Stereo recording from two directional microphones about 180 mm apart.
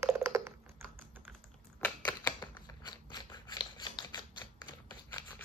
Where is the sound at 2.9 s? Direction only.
25° left (ahead or behind).